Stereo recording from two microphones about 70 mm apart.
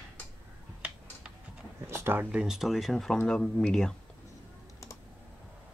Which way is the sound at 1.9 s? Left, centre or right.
Right.